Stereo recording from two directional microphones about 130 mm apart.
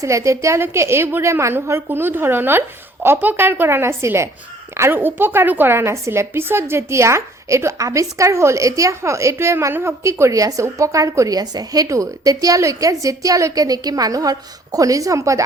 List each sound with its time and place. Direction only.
0.0 s a woman's voice: 25° right (ahead or behind)